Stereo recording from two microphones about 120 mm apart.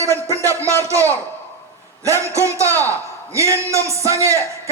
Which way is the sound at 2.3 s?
25° right (ahead or behind).